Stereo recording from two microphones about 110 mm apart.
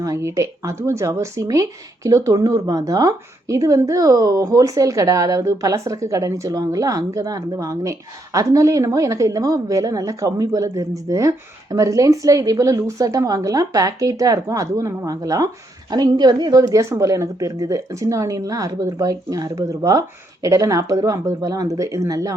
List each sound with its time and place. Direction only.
0.0 s speech: 30° right (ahead or behind)